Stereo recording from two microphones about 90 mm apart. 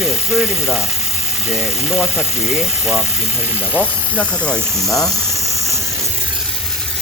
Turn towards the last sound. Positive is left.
turn(degrees=-35)  # may be behind; listen again after turning